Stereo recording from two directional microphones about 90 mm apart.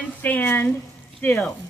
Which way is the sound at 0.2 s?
20° left (ahead or behind).